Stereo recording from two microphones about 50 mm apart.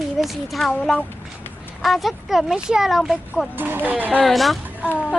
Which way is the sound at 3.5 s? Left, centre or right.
Right.